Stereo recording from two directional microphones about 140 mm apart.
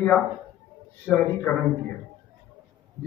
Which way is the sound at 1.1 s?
10° left (ahead or behind).